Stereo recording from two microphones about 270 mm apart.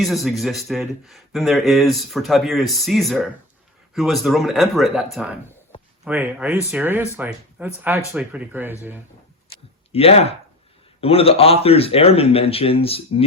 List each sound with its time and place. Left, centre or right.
0.0 s speech: centre
5.7 s a sound: centre
6.1 s speech: centre
9.9 s speech: left